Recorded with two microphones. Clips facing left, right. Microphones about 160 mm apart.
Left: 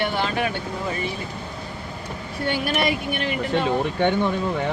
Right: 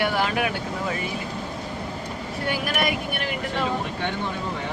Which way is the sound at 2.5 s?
30° left (ahead or behind).